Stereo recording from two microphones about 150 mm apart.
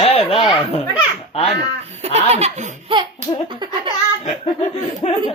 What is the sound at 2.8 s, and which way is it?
Laughter, 35° right (ahead or behind).